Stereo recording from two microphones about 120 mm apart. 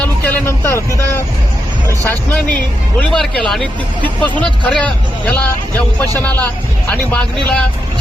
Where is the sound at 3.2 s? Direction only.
Centre (ahead or behind).